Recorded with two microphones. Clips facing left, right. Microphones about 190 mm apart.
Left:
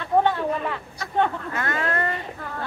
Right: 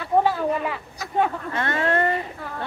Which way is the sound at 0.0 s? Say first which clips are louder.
Even; 5° right (ahead or behind).